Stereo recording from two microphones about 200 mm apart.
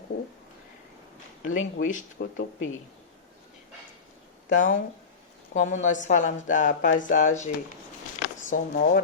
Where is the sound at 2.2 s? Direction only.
75° left (ahead or behind).